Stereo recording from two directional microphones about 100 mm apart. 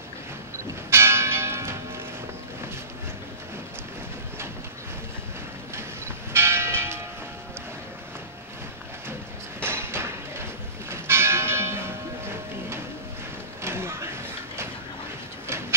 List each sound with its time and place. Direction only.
0.8 s church bell: 25° right (ahead or behind)
6.3 s church bell: 25° right (ahead or behind)
9.6 s church bell: 25° right (ahead or behind)
13.6 s a sound: 25° right (ahead or behind)